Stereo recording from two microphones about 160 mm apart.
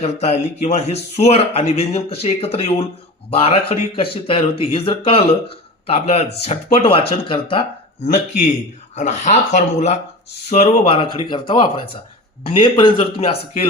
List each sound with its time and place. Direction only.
0.0 s speech: 40° left (ahead or behind)
8.0 s speech: 50° left (ahead or behind)